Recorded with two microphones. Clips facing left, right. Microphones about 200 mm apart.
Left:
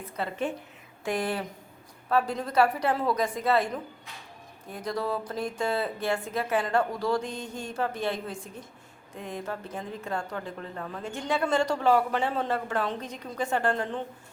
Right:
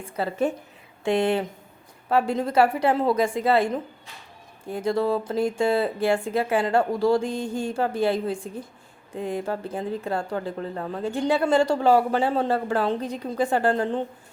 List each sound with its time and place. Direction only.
0.0 s speech: 35° right (ahead or behind)
1.0 s speech: 25° right (ahead or behind)
4.7 s speech: 25° right (ahead or behind)